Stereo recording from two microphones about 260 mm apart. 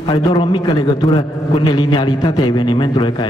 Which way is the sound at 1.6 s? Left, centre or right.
Centre.